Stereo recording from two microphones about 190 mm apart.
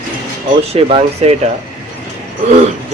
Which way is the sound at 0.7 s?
30° right (ahead or behind).